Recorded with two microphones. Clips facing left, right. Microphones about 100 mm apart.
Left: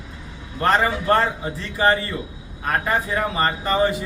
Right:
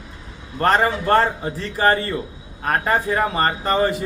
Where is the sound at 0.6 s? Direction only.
40° right (ahead or behind).